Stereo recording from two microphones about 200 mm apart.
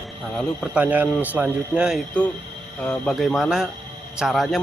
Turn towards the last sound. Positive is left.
turn(degrees=0)  # may be behind; listen again after turning